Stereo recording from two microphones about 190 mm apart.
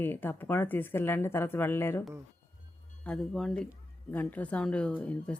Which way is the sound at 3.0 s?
5° left (ahead or behind).